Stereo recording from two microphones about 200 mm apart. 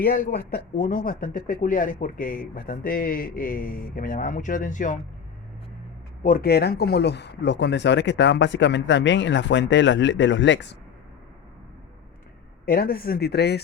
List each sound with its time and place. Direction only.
0.0 s speech: 45° left (ahead or behind)
6.2 s speech: 50° left (ahead or behind); by 10.8 s 65° left (ahead or behind)
12.6 s speech: 50° left (ahead or behind)